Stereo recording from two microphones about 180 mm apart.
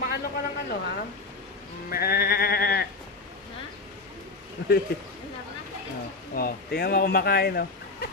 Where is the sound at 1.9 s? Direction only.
55° left (ahead or behind).